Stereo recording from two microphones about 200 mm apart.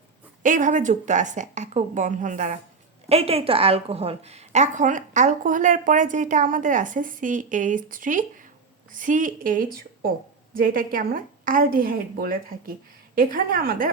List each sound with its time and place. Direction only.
0.4 s a woman's voice: 40° right (ahead or behind)